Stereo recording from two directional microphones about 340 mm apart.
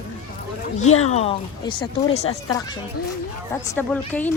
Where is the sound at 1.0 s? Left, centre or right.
Centre.